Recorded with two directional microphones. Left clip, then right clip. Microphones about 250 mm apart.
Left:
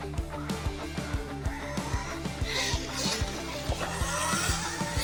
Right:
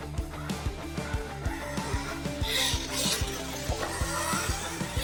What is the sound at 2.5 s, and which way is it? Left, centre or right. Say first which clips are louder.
Music: right 2 dB; right.